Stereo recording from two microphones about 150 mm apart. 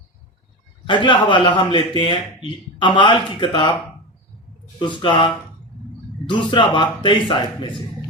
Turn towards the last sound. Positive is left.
turn(degrees=35)  # may be behind; listen again after turning